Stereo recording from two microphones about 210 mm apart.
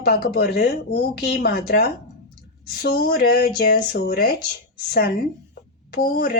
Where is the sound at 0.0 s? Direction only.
50° left (ahead or behind).